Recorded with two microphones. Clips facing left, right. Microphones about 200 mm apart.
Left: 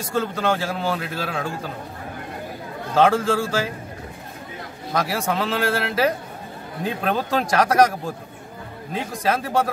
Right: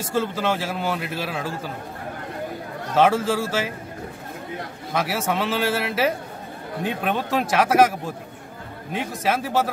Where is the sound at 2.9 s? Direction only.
5° right (ahead or behind).